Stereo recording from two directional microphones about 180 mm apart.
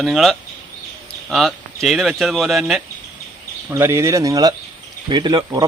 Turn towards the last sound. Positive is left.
turn(degrees=-25)  # may be behind; listen again after turning